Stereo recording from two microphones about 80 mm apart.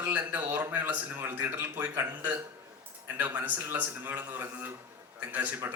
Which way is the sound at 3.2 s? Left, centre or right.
Right.